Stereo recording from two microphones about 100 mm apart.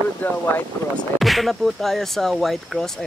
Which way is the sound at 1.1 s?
Centre (ahead or behind).